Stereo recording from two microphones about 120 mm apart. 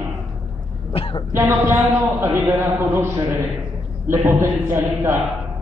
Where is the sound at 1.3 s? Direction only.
25° right (ahead or behind).